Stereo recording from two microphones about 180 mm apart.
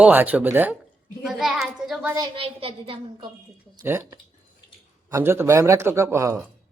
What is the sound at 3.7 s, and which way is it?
Speech, 15° right (ahead or behind).